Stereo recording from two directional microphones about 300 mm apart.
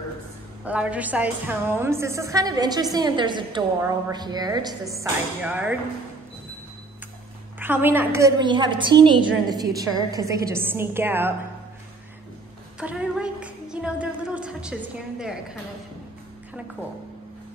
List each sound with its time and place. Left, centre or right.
0.7 s a woman's voice: centre
7.5 s a woman's voice: centre
12.8 s music: centre